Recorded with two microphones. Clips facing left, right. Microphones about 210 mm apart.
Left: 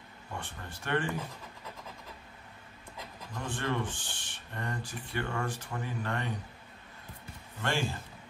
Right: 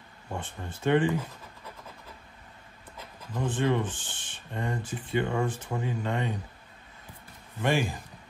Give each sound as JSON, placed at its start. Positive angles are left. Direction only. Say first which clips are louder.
{"t": 0.4, "sound": "speech", "louder": "right 10 dB", "side_deg": -20}
{"t": 3.3, "sound": "speech", "louder": "right 7 dB", "side_deg": -20}
{"t": 7.6, "sound": "speech", "louder": "right 6 dB", "side_deg": -15}